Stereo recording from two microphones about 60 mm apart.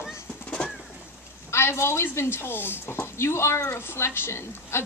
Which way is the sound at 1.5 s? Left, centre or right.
Left.